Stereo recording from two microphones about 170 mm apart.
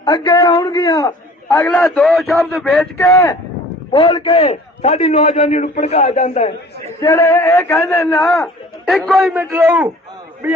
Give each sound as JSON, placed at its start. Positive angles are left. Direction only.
{"t": 0.0, "sound": "a man's voice", "side_deg": 20}
{"t": 1.5, "sound": "a man's voice", "side_deg": 5}
{"t": 3.9, "sound": "a man's voice", "side_deg": 30}
{"t": 7.0, "sound": "a man's voice", "side_deg": 15}
{"t": 8.0, "sound": "a man's voice", "side_deg": 0}
{"t": 9.1, "sound": "a man's voice", "side_deg": -10}